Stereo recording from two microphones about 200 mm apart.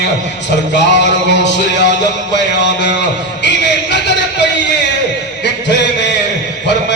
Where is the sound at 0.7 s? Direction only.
60° left (ahead or behind).